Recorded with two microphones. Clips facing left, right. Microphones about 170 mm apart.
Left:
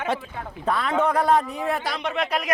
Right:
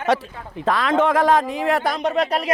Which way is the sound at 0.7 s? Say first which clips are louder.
Right 4 dB; 90° right.